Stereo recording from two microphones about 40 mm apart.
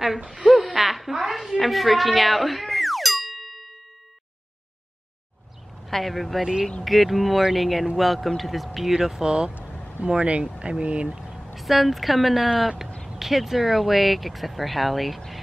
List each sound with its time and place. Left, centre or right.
0.4 s a sound: centre
0.7 s a woman's voice: centre
5.9 s speech: centre
8.9 s speech: centre
9.9 s speech: right
11.1 s vehicle: centre
11.4 s speech: centre